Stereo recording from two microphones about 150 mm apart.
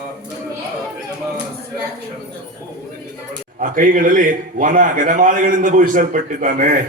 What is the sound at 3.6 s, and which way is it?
A man's voice, 65° right (ahead or behind).